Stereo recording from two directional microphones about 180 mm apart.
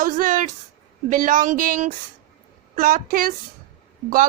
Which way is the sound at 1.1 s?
45° right (ahead or behind).